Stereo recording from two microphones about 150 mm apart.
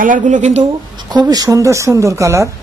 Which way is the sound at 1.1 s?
25° right (ahead or behind).